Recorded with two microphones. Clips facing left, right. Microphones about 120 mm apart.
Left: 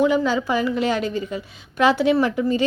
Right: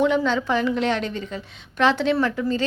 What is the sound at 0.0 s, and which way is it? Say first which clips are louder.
A woman's voice: left 1 dB; 5° left (ahead or behind).